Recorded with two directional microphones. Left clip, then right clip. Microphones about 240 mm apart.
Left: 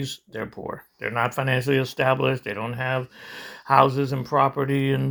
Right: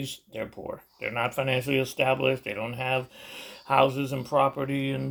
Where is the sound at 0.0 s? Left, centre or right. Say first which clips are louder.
Left 3 dB; centre.